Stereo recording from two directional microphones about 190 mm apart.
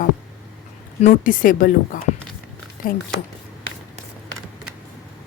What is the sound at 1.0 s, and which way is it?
A woman's voice, 45° left (ahead or behind).